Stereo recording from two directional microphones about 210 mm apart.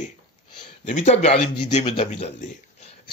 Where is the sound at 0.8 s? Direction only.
35° left (ahead or behind).